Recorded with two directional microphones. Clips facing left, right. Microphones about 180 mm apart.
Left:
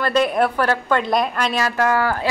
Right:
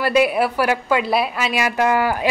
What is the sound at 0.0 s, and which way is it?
A woman's voice, 10° right (ahead or behind).